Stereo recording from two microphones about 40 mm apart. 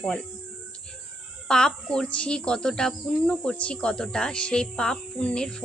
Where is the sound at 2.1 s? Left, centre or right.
Left.